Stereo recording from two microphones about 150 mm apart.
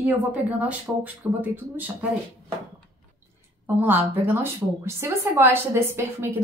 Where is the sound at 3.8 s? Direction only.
10° right (ahead or behind).